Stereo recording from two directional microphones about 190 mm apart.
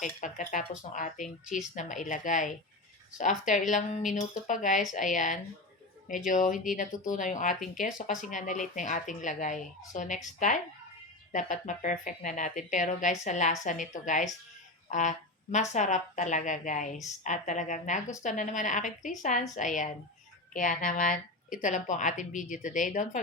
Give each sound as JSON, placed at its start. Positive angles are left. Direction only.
{"t": 0.0, "sound": "a woman's voice", "side_deg": 40}
{"t": 14.8, "sound": "a sound", "side_deg": 40}
{"t": 15.5, "sound": "a woman's voice", "side_deg": 40}